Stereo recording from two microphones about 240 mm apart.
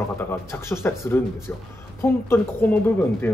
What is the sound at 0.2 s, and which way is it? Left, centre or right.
Speech, centre.